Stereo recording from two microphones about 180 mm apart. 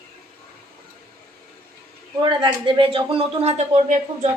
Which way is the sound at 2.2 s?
25° right (ahead or behind).